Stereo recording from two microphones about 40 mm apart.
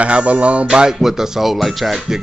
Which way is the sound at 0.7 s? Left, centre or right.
Centre.